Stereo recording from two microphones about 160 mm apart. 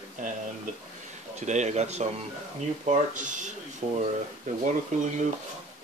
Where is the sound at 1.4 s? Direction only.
45° right (ahead or behind).